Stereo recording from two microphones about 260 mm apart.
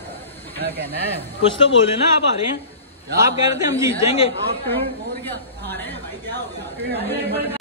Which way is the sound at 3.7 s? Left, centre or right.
Centre.